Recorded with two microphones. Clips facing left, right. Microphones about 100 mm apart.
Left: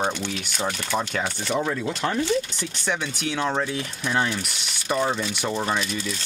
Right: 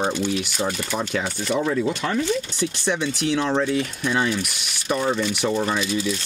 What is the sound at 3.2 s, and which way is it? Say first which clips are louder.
Speech: right 4 dB; centre (ahead or behind).